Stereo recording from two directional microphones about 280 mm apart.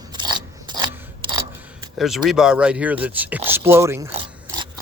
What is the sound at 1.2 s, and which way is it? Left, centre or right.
Camera, centre.